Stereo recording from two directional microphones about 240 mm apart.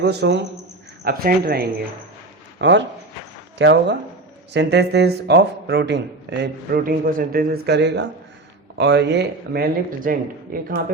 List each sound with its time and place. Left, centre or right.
0.0 s speech: right